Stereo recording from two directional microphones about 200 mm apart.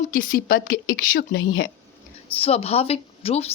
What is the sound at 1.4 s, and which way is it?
Speech, 75° left (ahead or behind).